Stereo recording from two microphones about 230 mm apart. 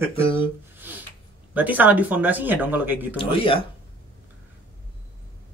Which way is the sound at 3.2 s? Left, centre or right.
Left.